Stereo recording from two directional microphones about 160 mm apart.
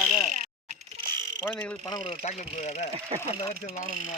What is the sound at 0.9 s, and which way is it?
Frog, 30° right (ahead or behind).